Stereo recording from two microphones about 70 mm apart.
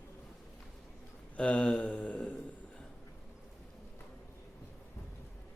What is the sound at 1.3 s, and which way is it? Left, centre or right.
Speech, centre.